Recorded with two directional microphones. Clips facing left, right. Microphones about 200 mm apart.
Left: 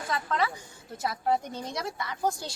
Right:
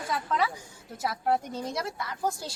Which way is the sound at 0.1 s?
10° right (ahead or behind).